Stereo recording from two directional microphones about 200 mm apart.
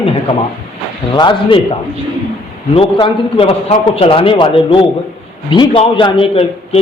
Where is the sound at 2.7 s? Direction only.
25° left (ahead or behind).